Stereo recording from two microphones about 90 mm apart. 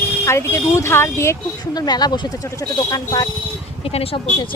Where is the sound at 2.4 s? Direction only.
40° left (ahead or behind).